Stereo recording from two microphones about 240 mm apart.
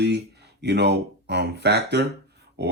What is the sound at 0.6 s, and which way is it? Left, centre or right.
Speech, right.